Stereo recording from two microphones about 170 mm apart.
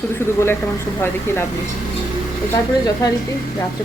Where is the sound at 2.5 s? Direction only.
20° left (ahead or behind).